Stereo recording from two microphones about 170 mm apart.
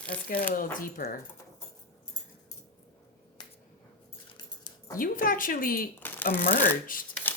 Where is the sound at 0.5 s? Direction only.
55° left (ahead or behind).